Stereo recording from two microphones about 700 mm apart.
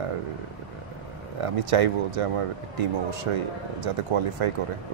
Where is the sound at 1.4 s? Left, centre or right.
Right.